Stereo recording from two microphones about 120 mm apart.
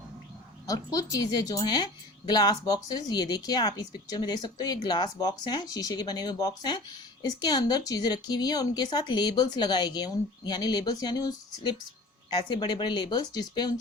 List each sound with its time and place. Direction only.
0.7 s a woman's voice: 30° left (ahead or behind)